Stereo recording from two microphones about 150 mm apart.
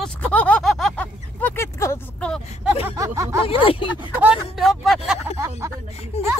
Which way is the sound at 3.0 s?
20° right (ahead or behind).